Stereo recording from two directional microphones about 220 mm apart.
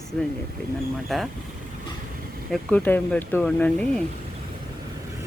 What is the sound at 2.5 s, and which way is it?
Speech, 5° left (ahead or behind).